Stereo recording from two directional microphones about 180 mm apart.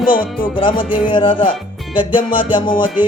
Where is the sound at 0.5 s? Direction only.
30° left (ahead or behind).